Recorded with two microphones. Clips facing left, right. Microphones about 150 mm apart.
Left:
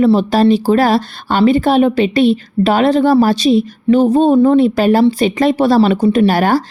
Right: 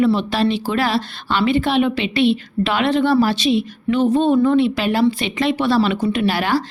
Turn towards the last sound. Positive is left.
turn(degrees=45)  # may be behind; listen again after turning